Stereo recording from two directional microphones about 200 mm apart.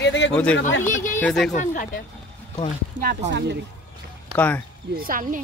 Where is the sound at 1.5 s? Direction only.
40° left (ahead or behind).